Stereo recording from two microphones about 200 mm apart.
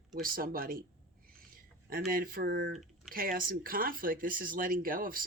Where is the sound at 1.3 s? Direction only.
45° right (ahead or behind).